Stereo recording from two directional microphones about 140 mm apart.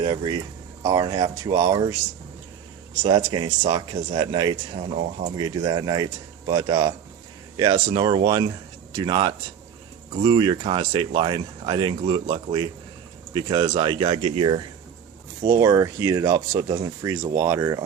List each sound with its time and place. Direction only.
0.0 s speech: 35° right (ahead or behind)
3.0 s speech: 35° right (ahead or behind)
15.5 s speech: 25° right (ahead or behind)